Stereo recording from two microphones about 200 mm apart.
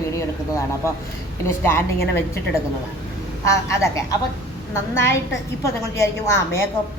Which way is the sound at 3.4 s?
15° left (ahead or behind).